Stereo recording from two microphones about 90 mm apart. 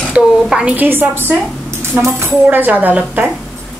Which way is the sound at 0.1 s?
10° right (ahead or behind).